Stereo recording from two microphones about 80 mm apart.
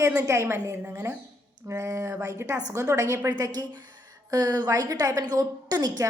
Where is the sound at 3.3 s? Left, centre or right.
Right.